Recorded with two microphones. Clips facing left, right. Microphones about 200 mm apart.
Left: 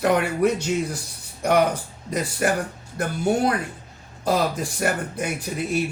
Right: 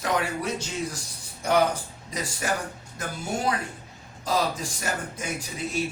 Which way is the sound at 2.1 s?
60° left (ahead or behind).